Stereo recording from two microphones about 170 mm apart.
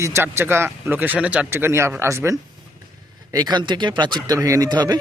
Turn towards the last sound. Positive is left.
turn(degrees=-25)  # may be behind; listen again after turning